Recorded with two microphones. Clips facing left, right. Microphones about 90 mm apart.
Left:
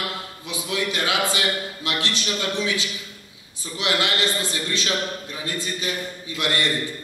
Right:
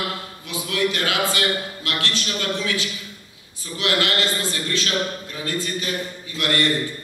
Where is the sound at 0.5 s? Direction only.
20° left (ahead or behind).